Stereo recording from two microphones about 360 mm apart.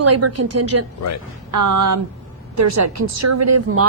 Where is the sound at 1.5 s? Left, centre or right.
Right.